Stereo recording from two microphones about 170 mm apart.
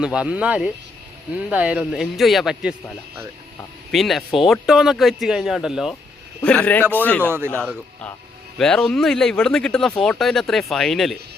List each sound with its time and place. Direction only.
0.0 s speech: 5° right (ahead or behind)
3.9 s speech: centre (ahead or behind)
7.2 s speech: 15° right (ahead or behind)
7.6 s speech: 5° left (ahead or behind)